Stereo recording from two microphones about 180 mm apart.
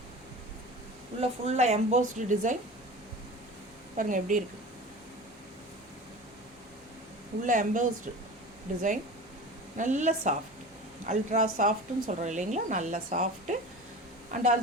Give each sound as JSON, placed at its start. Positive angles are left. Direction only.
{"t": 1.2, "sound": "speech", "side_deg": -40}
{"t": 3.9, "sound": "speech", "side_deg": -45}
{"t": 7.4, "sound": "speech", "side_deg": -45}